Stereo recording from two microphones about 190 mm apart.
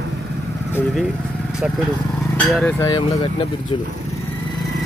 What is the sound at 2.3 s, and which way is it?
Speech, 5° left (ahead or behind).